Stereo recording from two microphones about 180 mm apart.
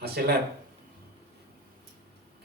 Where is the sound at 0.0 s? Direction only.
65° right (ahead or behind).